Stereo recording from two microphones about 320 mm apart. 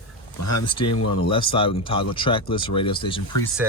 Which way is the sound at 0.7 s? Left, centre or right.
Centre.